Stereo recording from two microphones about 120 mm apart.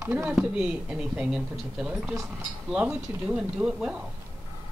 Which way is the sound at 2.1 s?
25° right (ahead or behind).